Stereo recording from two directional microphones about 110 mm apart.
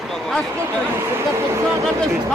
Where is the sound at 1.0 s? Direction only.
20° right (ahead or behind).